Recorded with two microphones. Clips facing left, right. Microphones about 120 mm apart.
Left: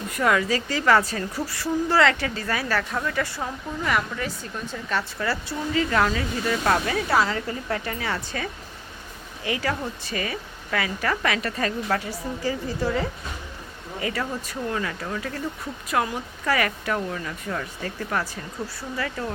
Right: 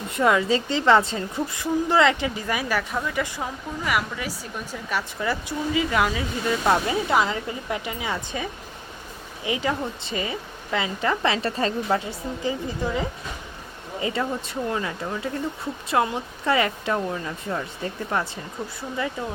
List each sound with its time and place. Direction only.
0.1 s a woman's voice: 20° right (ahead or behind)